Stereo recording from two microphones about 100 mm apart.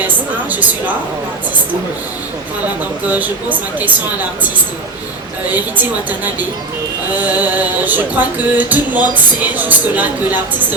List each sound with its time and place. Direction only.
0.5 s music: 15° right (ahead or behind)
3.1 s music: 15° right (ahead or behind)
5.5 s music: 15° right (ahead or behind)